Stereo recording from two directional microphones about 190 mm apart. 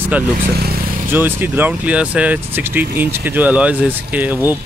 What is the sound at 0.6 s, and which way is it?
Vehicle, 55° right (ahead or behind).